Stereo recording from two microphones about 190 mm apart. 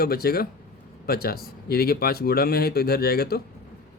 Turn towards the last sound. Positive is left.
turn(degrees=55)  # may be behind; listen again after turning